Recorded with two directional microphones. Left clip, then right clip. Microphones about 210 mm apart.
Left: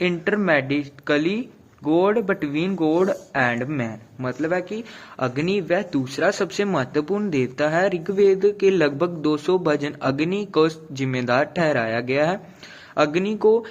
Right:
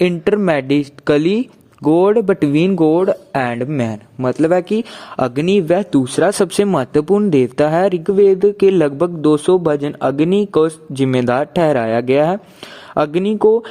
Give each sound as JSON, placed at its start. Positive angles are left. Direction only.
{"t": 0.0, "sound": "speech", "side_deg": -50}